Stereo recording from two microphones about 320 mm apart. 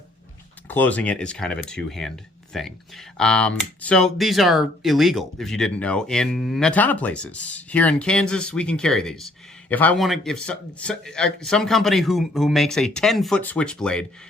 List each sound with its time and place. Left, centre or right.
0.7 s speech: centre